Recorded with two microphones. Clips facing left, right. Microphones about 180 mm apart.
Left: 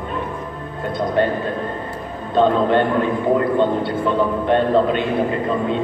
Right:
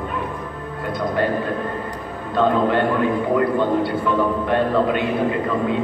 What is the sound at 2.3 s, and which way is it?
Speech, 25° left (ahead or behind).